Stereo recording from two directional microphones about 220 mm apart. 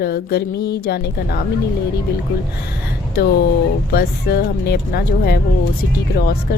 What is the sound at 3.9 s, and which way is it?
A woman's voice, 45° left (ahead or behind).